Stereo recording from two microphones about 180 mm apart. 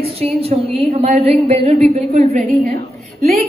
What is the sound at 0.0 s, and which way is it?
A woman's voice, 35° right (ahead or behind).